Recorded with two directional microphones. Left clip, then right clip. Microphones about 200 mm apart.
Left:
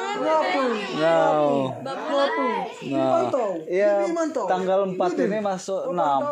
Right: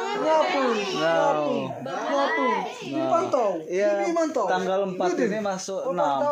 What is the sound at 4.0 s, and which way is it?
Speech, 10° left (ahead or behind).